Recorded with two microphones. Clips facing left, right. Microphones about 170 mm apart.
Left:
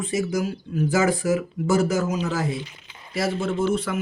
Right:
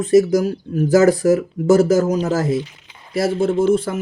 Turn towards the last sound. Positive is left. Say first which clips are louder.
# right 7 dB
turn(degrees=-30)  # may be behind; listen again after turning